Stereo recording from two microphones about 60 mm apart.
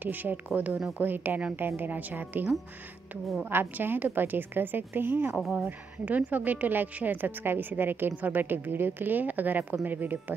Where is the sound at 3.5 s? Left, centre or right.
Right.